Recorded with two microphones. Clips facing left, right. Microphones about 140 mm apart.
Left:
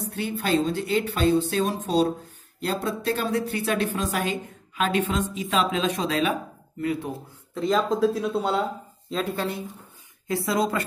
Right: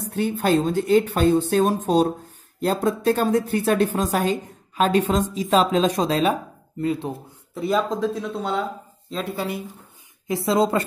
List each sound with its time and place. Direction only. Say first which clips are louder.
0.1 s a woman's voice: right 5 dB; 45° right (ahead or behind); by 7.1 s 30° right (ahead or behind)
7.5 s speech: right 1 dB; 5° right (ahead or behind); by 8.6 s 10° left (ahead or behind)
9.1 s speech: even; 5° right (ahead or behind)
10.2 s a woman's voice: right 4 dB; 20° right (ahead or behind)